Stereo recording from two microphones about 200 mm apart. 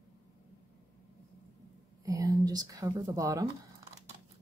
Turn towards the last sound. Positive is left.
turn(degrees=-15)  # may be behind; listen again after turning